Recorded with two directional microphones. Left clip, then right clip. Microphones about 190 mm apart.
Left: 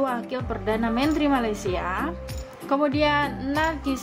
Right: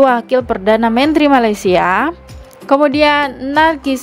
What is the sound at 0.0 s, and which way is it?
A woman's voice, 45° right (ahead or behind).